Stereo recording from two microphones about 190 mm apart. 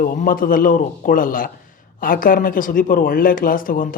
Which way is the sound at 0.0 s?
45° left (ahead or behind).